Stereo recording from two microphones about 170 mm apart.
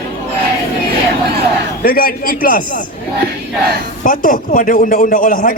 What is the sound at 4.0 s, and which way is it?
A man's voice, 50° left (ahead or behind).